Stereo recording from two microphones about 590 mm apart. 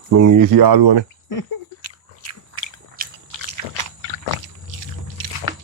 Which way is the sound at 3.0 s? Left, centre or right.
Centre.